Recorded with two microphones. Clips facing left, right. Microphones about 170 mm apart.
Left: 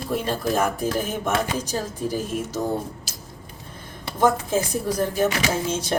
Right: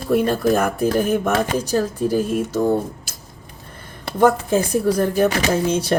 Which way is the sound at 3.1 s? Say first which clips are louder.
Even; 55° right (ahead or behind).